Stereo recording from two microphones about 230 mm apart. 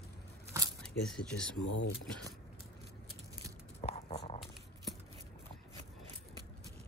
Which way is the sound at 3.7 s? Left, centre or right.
Left.